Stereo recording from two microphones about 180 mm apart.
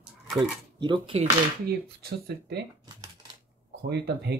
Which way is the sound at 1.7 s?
60° right (ahead or behind).